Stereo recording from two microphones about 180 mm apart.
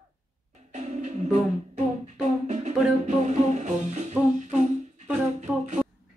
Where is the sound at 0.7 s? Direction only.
40° right (ahead or behind).